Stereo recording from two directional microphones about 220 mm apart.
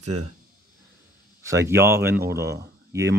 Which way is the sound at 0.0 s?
90° right.